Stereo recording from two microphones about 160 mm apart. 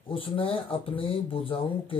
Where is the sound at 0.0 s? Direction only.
35° left (ahead or behind).